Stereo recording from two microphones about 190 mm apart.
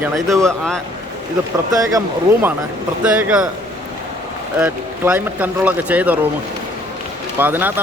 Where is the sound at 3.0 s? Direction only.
5° right (ahead or behind).